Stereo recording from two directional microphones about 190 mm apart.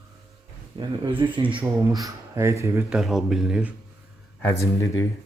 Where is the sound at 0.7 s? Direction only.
25° right (ahead or behind).